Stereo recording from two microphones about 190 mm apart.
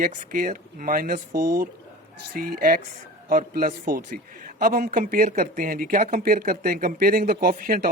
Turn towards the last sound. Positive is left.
turn(degrees=-45)  # may be behind; listen again after turning